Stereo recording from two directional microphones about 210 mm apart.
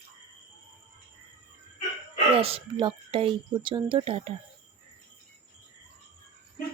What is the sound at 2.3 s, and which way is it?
Speech, 25° right (ahead or behind).